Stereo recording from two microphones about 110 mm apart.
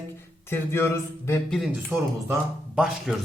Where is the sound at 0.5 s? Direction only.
25° left (ahead or behind).